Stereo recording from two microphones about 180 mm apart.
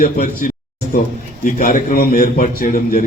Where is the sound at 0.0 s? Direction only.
55° left (ahead or behind).